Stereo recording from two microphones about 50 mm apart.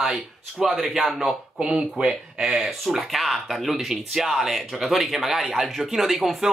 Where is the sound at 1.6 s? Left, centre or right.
Centre.